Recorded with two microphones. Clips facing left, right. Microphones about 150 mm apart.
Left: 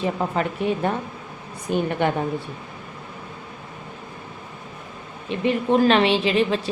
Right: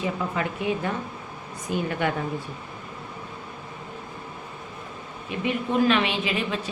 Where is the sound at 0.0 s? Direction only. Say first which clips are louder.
Left 4 dB; 40° left (ahead or behind).